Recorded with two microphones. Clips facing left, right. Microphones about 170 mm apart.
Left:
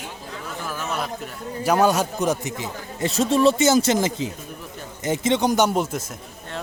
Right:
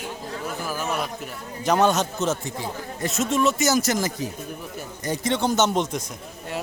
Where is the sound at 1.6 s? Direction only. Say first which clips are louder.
Left 1 dB; 10° left (ahead or behind).